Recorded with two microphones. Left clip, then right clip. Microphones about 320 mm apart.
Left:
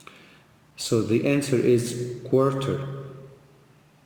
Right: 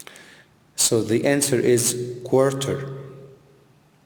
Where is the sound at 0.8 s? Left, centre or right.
Right.